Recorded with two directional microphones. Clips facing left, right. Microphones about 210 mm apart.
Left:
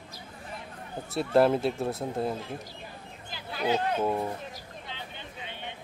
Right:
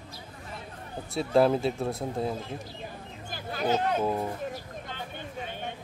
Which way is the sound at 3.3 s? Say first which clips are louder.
Right 1 dB; 45° right (ahead or behind).